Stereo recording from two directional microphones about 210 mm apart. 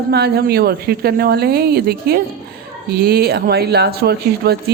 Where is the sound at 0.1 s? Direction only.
50° right (ahead or behind).